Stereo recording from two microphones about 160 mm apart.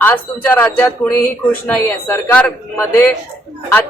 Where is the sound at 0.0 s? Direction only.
10° left (ahead or behind).